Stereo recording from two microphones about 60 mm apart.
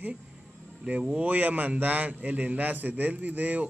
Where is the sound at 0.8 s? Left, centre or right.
Centre.